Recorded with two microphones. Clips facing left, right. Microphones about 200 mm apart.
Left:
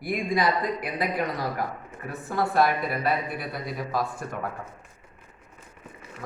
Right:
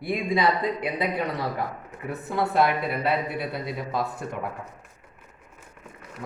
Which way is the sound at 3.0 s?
25° right (ahead or behind).